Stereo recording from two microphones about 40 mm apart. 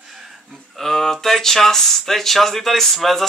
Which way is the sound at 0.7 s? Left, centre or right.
Centre.